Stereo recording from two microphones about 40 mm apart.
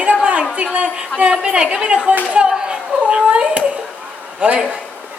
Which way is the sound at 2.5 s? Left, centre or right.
Centre.